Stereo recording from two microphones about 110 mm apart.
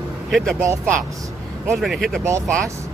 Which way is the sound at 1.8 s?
Centre (ahead or behind).